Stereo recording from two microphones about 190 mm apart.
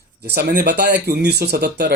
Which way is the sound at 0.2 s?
55° right (ahead or behind).